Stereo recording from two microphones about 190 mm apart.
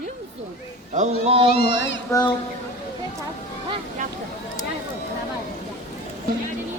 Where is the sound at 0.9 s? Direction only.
35° right (ahead or behind).